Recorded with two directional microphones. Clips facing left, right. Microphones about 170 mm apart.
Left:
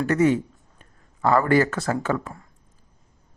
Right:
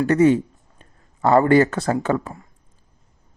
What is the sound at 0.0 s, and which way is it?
Speech, 25° right (ahead or behind).